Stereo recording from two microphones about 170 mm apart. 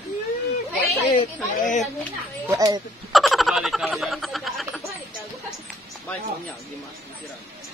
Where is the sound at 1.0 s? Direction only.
45° left (ahead or behind).